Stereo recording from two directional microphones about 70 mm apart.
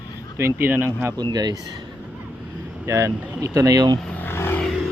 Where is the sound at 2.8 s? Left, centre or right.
Right.